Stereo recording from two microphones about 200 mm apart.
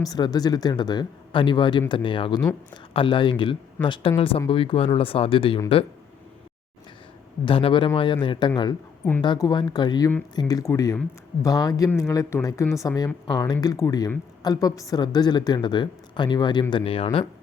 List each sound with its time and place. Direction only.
0.0 s speech: 20° left (ahead or behind)
7.4 s speech: 25° left (ahead or behind)